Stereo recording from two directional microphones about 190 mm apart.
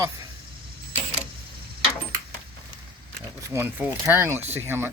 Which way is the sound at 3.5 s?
10° right (ahead or behind).